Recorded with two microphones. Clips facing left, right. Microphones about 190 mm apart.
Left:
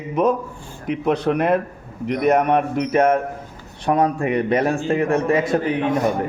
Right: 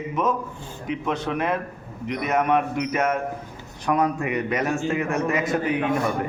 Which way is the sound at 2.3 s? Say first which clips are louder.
Left 1 dB; 35° left (ahead or behind).